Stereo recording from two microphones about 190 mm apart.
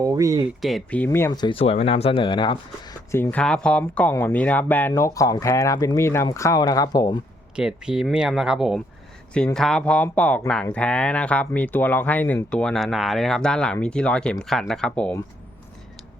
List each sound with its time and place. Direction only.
0.0 s speech: 15° right (ahead or behind)
0.6 s speech: 5° left (ahead or behind); by 2.6 s 25° left (ahead or behind)
3.1 s speech: 15° left (ahead or behind)
7.5 s speech: 5° right (ahead or behind)